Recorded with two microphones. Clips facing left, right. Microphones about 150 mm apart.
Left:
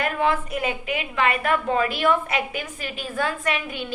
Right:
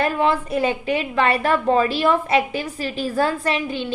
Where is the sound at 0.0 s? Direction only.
30° right (ahead or behind).